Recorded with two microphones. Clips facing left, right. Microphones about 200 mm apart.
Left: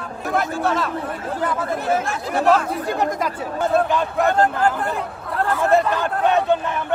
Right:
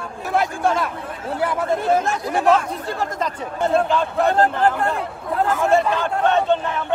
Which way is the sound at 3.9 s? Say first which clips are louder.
Even; centre (ahead or behind).